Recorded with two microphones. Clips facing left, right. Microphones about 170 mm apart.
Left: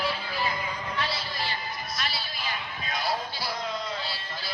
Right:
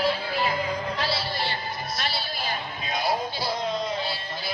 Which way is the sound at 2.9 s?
20° right (ahead or behind).